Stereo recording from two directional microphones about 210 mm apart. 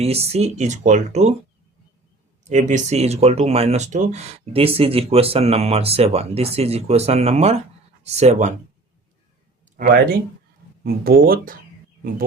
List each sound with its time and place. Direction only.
0.0 s speech: 30° right (ahead or behind)
2.4 s speech: 35° right (ahead or behind)
9.7 s speech: 45° right (ahead or behind)